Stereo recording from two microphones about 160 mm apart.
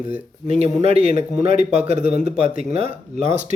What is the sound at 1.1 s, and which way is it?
Speech, 60° left (ahead or behind).